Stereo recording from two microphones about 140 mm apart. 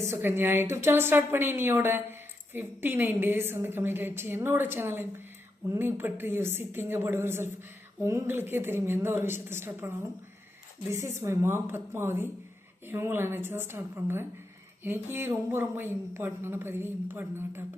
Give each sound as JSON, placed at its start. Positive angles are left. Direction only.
{"t": 0.0, "sound": "a woman's voice", "side_deg": -15}